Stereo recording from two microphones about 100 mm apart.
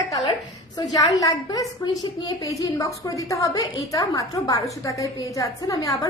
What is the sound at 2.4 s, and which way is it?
A woman's voice, 35° left (ahead or behind).